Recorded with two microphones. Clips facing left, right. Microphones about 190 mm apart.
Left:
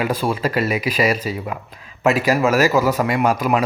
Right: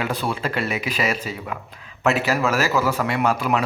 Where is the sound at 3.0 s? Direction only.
10° left (ahead or behind).